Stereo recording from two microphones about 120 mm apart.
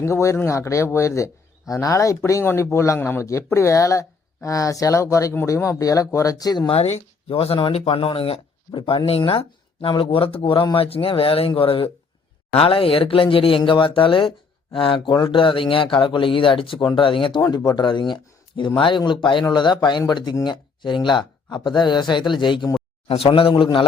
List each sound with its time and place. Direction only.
0.0 s a man's voice: 25° left (ahead or behind)
6.7 s speech: 60° left (ahead or behind); by 22.7 s 40° left (ahead or behind)
23.0 s speech: 55° left (ahead or behind)